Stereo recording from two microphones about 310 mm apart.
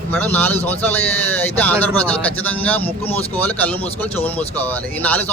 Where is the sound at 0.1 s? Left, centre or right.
Centre.